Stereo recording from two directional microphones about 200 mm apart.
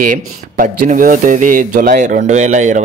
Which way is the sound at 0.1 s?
40° right (ahead or behind).